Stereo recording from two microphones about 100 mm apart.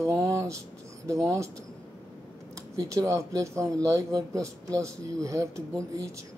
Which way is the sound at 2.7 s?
35° right (ahead or behind).